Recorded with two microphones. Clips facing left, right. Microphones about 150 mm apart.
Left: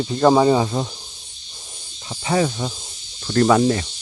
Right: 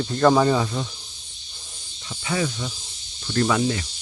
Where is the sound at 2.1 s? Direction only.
35° left (ahead or behind).